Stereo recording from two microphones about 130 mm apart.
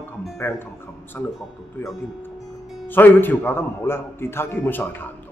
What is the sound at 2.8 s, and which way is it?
A man's voice, 15° left (ahead or behind).